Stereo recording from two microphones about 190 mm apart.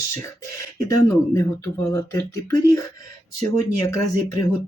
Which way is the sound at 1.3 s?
15° left (ahead or behind).